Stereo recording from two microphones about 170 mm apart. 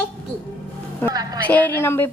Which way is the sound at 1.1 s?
20° right (ahead or behind).